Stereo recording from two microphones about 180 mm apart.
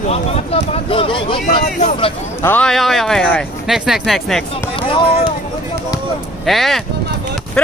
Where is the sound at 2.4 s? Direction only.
5° left (ahead or behind).